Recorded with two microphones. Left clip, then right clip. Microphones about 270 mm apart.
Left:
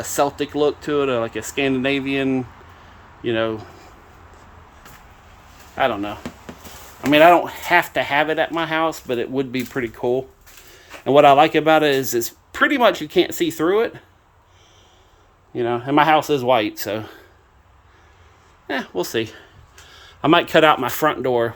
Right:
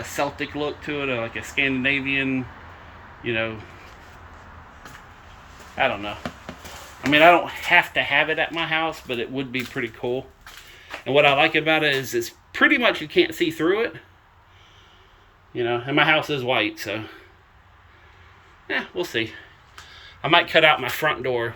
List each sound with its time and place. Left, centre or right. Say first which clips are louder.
0.0 s speech: left 6 dB; left
5.7 s speech: left 3 dB; centre
15.5 s speech: left 3 dB; centre
18.7 s speech: left 2 dB; left